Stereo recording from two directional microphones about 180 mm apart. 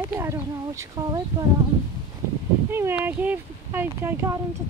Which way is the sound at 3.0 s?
10° right (ahead or behind).